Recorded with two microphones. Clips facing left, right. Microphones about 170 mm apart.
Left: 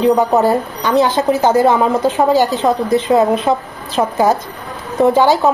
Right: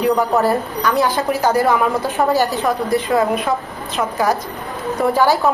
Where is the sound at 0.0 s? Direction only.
25° left (ahead or behind).